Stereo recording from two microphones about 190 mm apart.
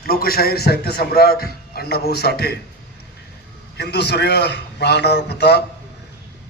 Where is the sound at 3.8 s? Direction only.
60° left (ahead or behind).